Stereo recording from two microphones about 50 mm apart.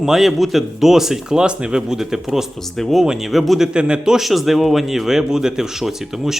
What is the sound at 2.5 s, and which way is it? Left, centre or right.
Speech, centre.